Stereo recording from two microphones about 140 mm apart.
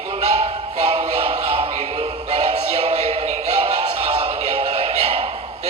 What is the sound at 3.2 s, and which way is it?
Synthetic singing, 55° right (ahead or behind).